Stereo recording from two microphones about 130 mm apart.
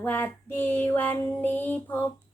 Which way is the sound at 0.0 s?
15° left (ahead or behind).